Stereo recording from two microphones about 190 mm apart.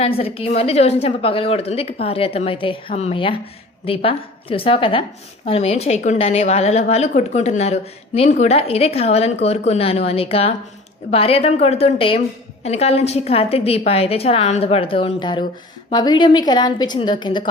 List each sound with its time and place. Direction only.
0.0 s a woman's voice: 30° left (ahead or behind)